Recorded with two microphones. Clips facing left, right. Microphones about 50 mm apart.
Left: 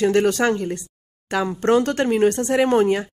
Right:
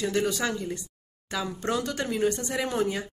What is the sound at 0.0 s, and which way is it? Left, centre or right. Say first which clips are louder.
Speech: left 9 dB; left.